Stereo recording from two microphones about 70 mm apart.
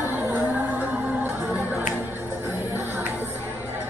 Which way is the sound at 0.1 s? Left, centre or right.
Right.